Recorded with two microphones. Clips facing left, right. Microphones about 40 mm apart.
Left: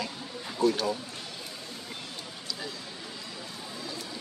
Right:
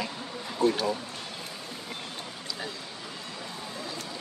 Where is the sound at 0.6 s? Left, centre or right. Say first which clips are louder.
Even; right.